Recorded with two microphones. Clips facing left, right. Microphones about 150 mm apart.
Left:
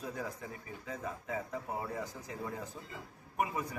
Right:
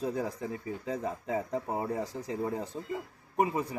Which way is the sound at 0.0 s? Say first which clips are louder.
Right 8 dB; 30° right (ahead or behind).